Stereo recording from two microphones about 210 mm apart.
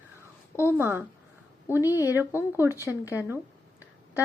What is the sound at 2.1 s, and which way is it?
Speech, 10° right (ahead or behind).